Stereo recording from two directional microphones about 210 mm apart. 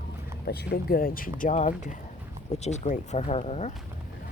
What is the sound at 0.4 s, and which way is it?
Speech, 50° left (ahead or behind).